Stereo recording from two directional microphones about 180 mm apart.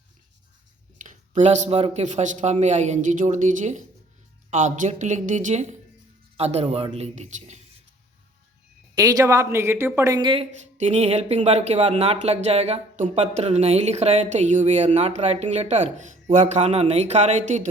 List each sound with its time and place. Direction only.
0.9 s a woman's voice: 45° right (ahead or behind)
9.0 s a woman's voice: 20° right (ahead or behind); by 17.6 s 40° right (ahead or behind)